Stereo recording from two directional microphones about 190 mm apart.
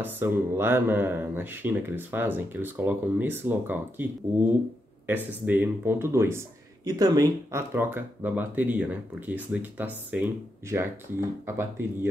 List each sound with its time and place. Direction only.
0.0 s speech: 10° right (ahead or behind)